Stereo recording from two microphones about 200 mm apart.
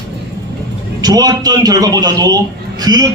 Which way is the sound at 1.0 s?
20° right (ahead or behind).